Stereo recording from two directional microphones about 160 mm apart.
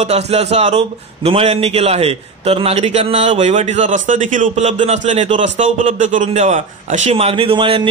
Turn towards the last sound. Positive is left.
turn(degrees=-35)  # may be behind; listen again after turning